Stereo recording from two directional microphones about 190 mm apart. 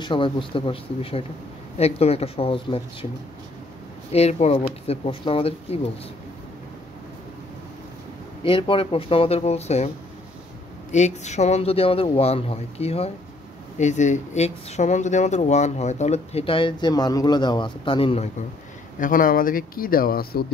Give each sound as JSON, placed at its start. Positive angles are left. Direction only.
{"t": 0.0, "sound": "speech", "side_deg": 25}
{"t": 4.1, "sound": "speech", "side_deg": 35}
{"t": 8.5, "sound": "speech", "side_deg": 25}
{"t": 10.9, "sound": "speech", "side_deg": 35}
{"t": 18.9, "sound": "speech", "side_deg": 45}